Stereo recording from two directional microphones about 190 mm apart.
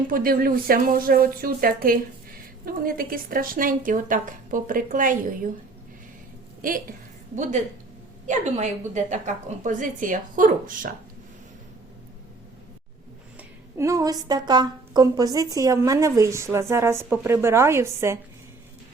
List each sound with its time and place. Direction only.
0.1 s speech: 50° right (ahead or behind)
6.6 s a woman's voice: 45° right (ahead or behind)
8.3 s speech: 40° right (ahead or behind)
13.7 s a woman's voice: 15° right (ahead or behind)